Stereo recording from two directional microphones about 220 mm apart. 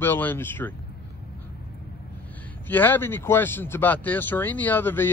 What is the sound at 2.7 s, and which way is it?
Speech, 10° left (ahead or behind).